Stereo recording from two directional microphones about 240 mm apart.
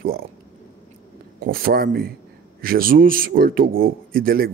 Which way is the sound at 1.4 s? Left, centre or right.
Right.